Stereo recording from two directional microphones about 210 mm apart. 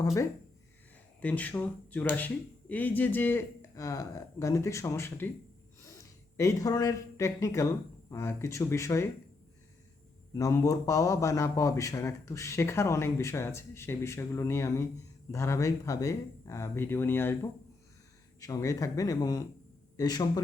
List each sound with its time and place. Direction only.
0.0 s a man's voice: 15° left (ahead or behind)
10.3 s a man's voice: 15° left (ahead or behind)